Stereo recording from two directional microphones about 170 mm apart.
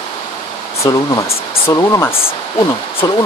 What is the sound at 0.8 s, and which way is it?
Speech, 25° left (ahead or behind).